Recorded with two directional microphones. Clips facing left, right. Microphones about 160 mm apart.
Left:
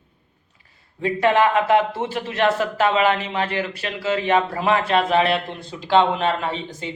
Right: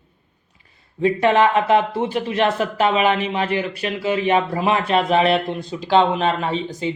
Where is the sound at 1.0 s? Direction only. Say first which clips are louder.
Right 2 dB; 20° right (ahead or behind).